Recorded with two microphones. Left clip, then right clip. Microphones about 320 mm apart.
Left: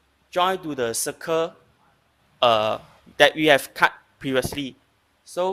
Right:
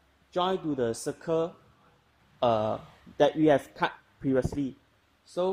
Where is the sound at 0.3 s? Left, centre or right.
Left.